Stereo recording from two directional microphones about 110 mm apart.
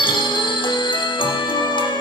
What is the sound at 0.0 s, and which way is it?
Music, 45° left (ahead or behind).